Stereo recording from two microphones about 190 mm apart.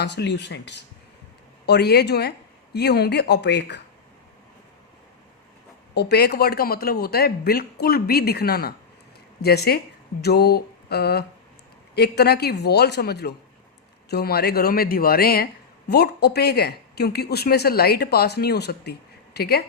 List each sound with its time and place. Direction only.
0.0 s speech: 65° left (ahead or behind)
5.9 s speech: 60° left (ahead or behind)